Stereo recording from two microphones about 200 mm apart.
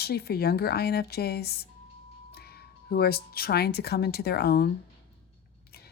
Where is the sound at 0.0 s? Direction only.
50° left (ahead or behind).